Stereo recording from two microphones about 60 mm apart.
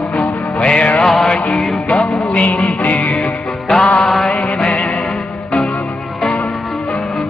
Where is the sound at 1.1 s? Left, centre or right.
Centre.